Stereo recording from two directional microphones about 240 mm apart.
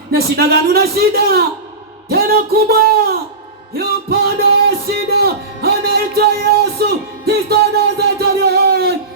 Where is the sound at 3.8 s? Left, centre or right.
Right.